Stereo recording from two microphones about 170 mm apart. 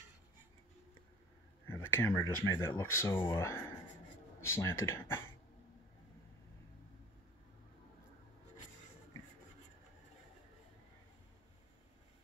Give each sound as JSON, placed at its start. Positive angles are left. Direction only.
{"t": 1.7, "sound": "speech", "side_deg": 15}